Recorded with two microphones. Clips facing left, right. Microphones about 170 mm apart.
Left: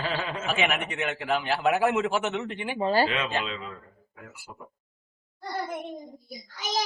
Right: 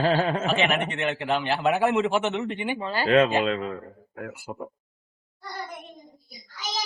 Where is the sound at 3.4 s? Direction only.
55° right (ahead or behind).